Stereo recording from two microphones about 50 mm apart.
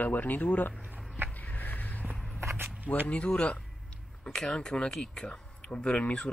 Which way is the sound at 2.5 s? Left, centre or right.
Right.